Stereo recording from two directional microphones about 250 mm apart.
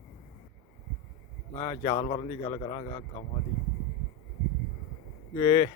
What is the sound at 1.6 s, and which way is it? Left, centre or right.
A man's voice, centre.